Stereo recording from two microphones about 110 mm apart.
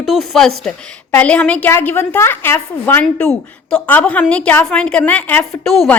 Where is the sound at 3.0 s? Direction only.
5° left (ahead or behind).